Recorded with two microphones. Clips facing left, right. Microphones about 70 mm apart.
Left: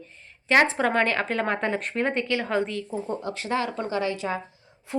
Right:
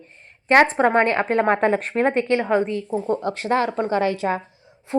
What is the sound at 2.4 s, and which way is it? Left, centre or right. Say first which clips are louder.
Speech: right 6 dB; centre.